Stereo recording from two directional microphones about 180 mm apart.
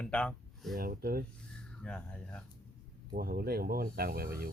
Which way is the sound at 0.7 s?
55° right (ahead or behind).